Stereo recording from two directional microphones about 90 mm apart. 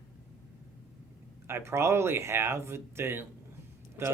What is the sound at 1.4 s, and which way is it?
Speech, 30° right (ahead or behind).